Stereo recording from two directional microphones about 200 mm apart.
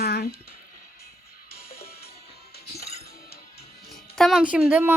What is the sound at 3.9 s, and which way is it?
A woman's voice, centre (ahead or behind).